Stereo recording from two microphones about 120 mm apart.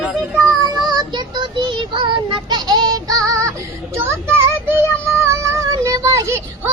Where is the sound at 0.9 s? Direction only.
35° right (ahead or behind).